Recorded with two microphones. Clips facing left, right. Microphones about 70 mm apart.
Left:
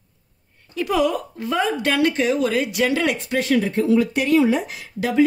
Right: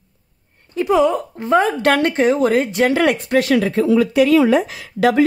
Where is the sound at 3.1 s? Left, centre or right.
Right.